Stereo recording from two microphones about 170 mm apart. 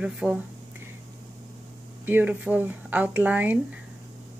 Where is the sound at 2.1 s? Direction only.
10° right (ahead or behind).